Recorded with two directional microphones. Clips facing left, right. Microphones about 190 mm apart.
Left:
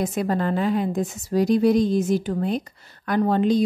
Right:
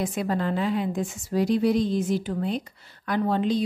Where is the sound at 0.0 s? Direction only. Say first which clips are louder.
Left 3 dB; 45° left (ahead or behind).